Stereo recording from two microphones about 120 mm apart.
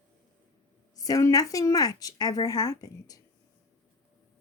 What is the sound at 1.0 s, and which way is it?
A woman's voice, 30° left (ahead or behind).